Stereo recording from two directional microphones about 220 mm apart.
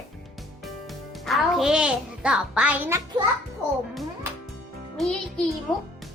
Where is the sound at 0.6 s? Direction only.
Centre (ahead or behind).